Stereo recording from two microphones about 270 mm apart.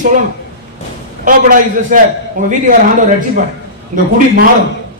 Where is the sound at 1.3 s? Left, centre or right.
Right.